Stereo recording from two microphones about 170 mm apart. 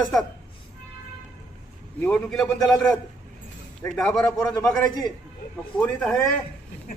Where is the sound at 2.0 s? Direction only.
5° left (ahead or behind).